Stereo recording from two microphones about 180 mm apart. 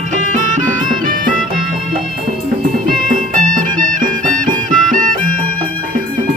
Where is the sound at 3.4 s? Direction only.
45° right (ahead or behind).